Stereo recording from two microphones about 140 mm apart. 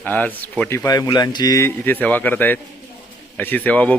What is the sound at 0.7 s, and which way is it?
A man's voice, 20° left (ahead or behind).